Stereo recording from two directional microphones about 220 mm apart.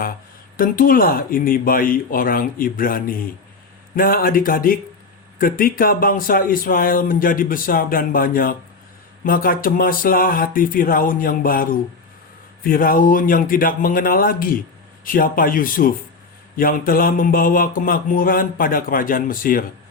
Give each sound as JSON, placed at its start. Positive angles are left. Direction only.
{"t": 0.5, "sound": "speech", "side_deg": 40}